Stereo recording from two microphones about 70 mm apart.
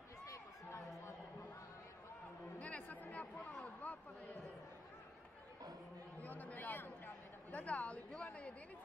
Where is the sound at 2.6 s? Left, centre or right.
Centre.